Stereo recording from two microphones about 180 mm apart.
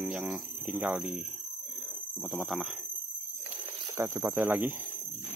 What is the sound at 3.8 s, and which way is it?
Speech, 15° right (ahead or behind).